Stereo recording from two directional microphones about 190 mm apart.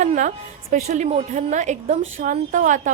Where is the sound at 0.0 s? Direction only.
40° right (ahead or behind).